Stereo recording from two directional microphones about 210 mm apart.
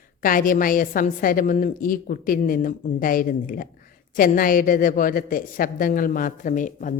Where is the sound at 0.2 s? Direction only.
40° left (ahead or behind).